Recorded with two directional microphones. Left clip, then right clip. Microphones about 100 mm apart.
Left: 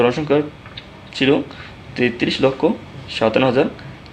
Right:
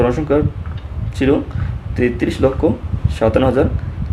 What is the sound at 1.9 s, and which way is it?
Speech, 15° right (ahead or behind).